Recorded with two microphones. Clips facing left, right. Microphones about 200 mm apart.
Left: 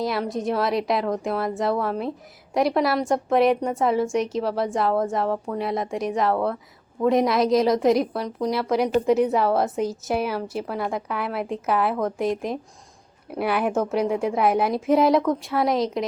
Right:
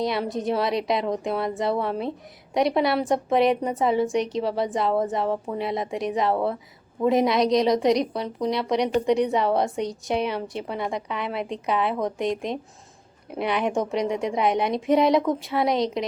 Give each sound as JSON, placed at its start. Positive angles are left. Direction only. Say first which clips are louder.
{"t": 0.0, "sound": "a woman's voice", "louder": "even", "side_deg": 0}